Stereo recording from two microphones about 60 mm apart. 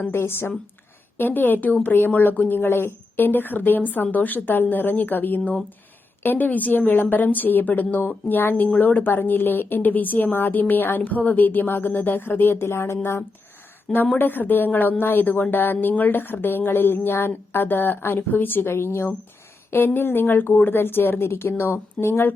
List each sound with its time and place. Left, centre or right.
0.1 s speech: left
14.2 s speech: left